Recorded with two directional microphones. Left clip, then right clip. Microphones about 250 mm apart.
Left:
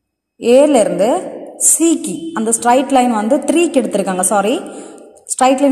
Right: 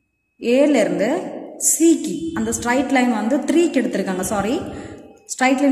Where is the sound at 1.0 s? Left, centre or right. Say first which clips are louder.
Left 6 dB; centre.